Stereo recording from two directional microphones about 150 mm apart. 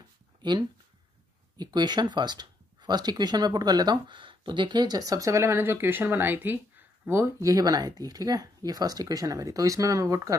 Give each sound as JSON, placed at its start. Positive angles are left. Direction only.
{"t": 0.4, "sound": "speech", "side_deg": -30}